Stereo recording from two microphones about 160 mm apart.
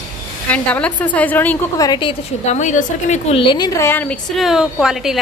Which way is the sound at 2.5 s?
50° left (ahead or behind).